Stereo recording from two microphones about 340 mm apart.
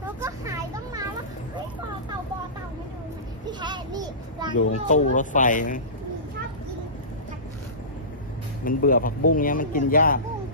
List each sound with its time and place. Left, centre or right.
0.0 s vehicle: centre
3.4 s a sound: centre
4.7 s speech: left
8.6 s speech: left